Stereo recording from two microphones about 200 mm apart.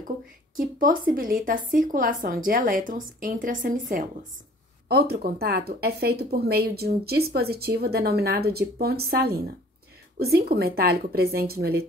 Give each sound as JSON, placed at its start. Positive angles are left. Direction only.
{"t": 0.6, "sound": "speech", "side_deg": -45}